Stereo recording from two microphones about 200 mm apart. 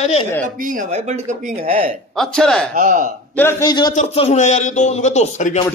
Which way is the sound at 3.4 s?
15° left (ahead or behind).